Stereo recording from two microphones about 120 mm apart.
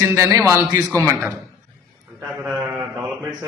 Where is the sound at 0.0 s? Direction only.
25° right (ahead or behind).